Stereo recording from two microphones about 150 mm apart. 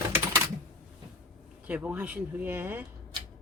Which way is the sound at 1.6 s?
10° right (ahead or behind).